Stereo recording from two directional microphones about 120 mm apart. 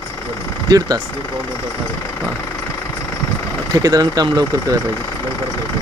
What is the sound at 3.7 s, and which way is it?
Speech, 30° right (ahead or behind).